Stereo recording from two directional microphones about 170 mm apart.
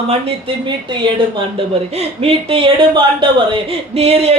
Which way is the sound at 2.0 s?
35° right (ahead or behind).